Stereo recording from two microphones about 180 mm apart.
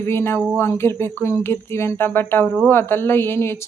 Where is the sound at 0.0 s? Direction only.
15° left (ahead or behind).